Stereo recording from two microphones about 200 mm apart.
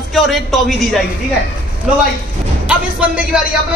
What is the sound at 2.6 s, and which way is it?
Speech, 5° right (ahead or behind).